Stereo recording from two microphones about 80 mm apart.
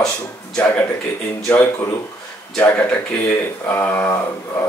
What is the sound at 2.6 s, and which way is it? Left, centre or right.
Speech, left.